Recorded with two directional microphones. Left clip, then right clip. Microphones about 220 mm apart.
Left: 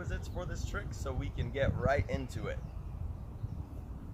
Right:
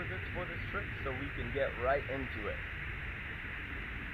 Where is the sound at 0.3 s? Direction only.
30° left (ahead or behind).